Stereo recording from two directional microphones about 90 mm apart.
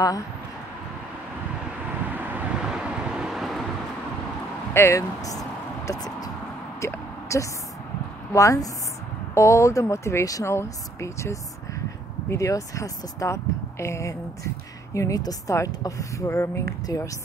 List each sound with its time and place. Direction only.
2.0 s vehicle: 20° right (ahead or behind)
2.6 s vehicle: 10° right (ahead or behind)
4.7 s speech: 35° left (ahead or behind)
6.8 s a sound: 35° left (ahead or behind)
8.3 s speech: 35° left (ahead or behind)